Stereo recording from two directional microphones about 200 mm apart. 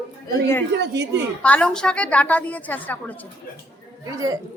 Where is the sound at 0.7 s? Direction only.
60° right (ahead or behind).